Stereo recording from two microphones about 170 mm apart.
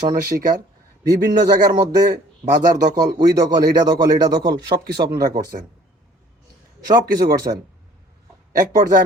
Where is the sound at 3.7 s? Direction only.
25° right (ahead or behind).